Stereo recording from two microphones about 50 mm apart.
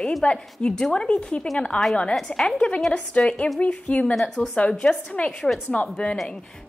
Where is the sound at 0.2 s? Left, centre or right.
Left.